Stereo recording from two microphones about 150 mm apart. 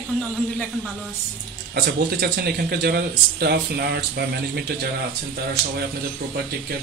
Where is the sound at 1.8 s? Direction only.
90° right.